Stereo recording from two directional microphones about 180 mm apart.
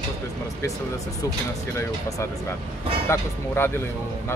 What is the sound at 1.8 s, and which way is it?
Speech, 20° left (ahead or behind).